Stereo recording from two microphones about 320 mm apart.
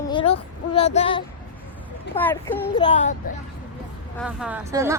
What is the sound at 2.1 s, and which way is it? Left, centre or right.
A child's voice, centre.